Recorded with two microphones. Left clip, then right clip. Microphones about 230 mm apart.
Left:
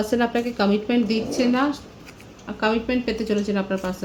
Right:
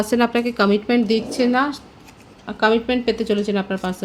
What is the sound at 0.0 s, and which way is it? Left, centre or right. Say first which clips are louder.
Speech: right 3 dB; right.